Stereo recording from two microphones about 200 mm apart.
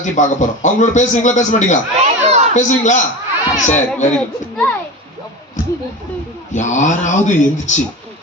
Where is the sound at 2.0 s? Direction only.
30° right (ahead or behind).